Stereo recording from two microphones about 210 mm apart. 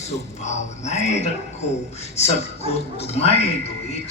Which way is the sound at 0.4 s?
30° left (ahead or behind).